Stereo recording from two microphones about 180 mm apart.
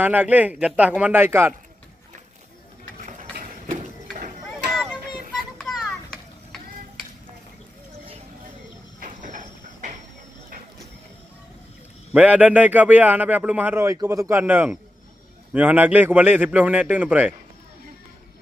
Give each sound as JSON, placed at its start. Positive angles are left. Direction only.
{"t": 0.0, "sound": "a man's voice", "side_deg": -10}
{"t": 3.1, "sound": "a sound", "side_deg": -45}
{"t": 5.6, "sound": "children playing", "side_deg": 0}
{"t": 9.0, "sound": "train", "side_deg": -45}
{"t": 12.1, "sound": "a man's voice", "side_deg": -5}